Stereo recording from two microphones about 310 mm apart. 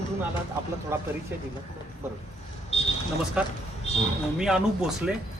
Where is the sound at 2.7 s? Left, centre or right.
Centre.